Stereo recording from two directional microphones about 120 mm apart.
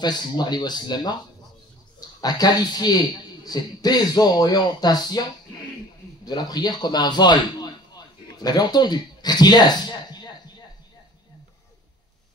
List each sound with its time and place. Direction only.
0.0 s speech: 35° left (ahead or behind)
6.2 s speech: 35° left (ahead or behind)